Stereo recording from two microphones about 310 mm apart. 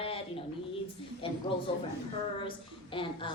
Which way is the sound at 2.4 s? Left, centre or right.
Centre.